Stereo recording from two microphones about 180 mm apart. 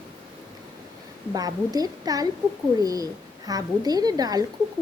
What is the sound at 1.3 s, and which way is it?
Speech, 20° right (ahead or behind).